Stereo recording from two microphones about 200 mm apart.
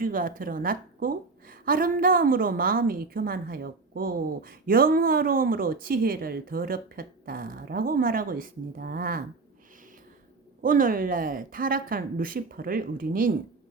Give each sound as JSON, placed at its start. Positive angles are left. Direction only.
{"t": 0.0, "sound": "a woman's voice", "side_deg": -45}
{"t": 10.6, "sound": "a woman's voice", "side_deg": -45}